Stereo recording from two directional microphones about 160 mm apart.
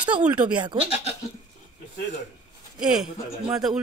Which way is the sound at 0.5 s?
30° right (ahead or behind).